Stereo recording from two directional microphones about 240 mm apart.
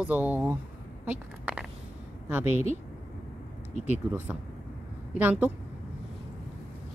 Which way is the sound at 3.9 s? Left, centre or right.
Centre.